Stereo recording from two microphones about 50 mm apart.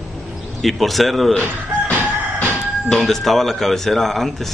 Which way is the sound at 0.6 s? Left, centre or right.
Centre.